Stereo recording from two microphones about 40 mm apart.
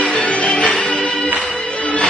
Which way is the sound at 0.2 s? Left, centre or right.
Left.